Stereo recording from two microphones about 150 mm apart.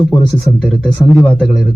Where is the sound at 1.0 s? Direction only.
25° left (ahead or behind).